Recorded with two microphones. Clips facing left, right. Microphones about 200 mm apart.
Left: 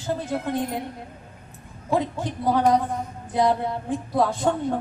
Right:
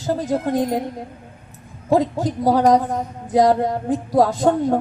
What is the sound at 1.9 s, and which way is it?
A woman's voice, 40° right (ahead or behind).